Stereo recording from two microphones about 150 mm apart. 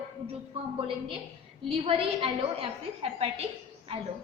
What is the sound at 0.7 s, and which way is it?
A woman's voice, 35° right (ahead or behind).